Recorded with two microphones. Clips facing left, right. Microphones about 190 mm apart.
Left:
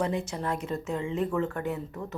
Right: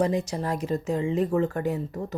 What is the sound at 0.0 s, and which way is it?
Speech, 35° right (ahead or behind).